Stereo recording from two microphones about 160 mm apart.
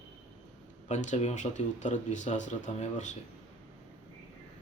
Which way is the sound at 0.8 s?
45° left (ahead or behind).